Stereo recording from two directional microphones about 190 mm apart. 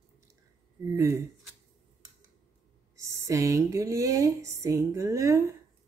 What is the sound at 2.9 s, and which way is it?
Speech, 15° right (ahead or behind).